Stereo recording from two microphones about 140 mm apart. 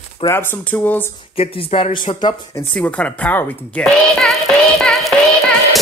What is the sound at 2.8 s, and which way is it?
A woman's voice, 10° left (ahead or behind).